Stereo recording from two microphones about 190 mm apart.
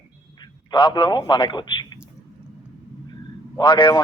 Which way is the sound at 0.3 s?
25° left (ahead or behind).